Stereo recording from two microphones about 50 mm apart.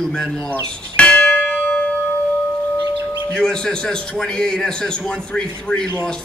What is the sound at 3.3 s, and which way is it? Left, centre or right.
A man's voice, centre.